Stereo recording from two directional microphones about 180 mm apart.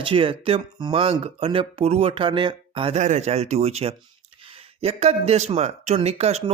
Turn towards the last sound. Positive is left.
turn(degrees=-35)  # may be behind; listen again after turning